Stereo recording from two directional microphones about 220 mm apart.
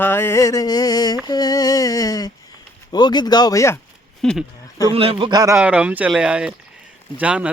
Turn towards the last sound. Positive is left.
turn(degrees=-5)  # may be behind; listen again after turning